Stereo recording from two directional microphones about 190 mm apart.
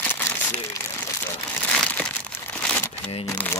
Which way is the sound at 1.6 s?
5° left (ahead or behind).